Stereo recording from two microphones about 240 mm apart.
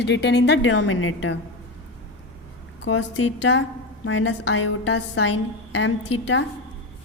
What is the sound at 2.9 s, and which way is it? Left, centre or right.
A woman's voice, left.